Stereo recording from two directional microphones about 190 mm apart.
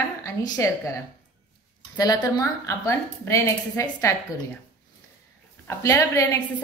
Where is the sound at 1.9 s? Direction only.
20° left (ahead or behind).